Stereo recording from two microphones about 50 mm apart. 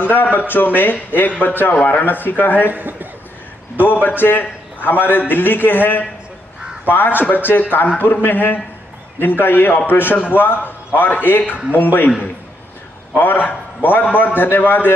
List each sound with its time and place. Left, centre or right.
0.0 s a man's voice: left
2.7 s a man's voice: right
3.8 s a man's voice: left
7.4 s a man's voice: left
13.2 s a man's voice: left